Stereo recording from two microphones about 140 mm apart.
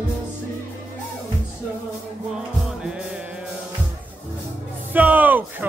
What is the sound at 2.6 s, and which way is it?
Music, 5° right (ahead or behind).